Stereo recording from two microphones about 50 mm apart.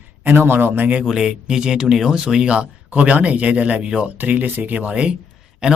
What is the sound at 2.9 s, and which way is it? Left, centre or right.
Speech, right.